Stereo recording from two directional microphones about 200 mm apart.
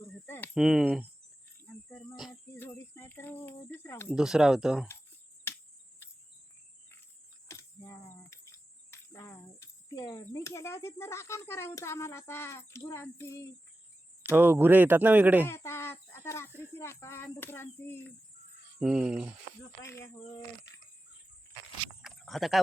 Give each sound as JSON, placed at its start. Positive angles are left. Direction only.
{"t": 0.3, "sound": "a sound", "side_deg": 10}
{"t": 0.5, "sound": "speech", "side_deg": 0}
{"t": 1.6, "sound": "cricket", "side_deg": 10}
{"t": 2.6, "sound": "speech", "side_deg": 10}
{"t": 4.1, "sound": "speech", "side_deg": -5}
{"t": 5.5, "sound": "cricket", "side_deg": 10}
{"t": 7.4, "sound": "cricket", "side_deg": 15}
{"t": 14.2, "sound": "speech", "side_deg": -10}
{"t": 15.4, "sound": "speech", "side_deg": 15}
{"t": 18.8, "sound": "speech", "side_deg": -5}
{"t": 19.8, "sound": "speech", "side_deg": 15}
{"t": 22.0, "sound": "a sound", "side_deg": 0}